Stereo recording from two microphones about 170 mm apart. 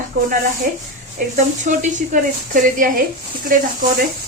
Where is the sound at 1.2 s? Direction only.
55° right (ahead or behind).